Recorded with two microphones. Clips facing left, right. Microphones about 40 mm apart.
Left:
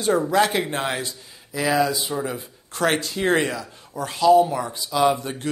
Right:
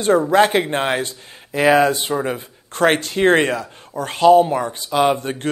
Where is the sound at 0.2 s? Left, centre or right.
Right.